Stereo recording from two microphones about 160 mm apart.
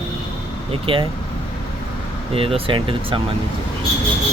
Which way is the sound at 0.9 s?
35° right (ahead or behind).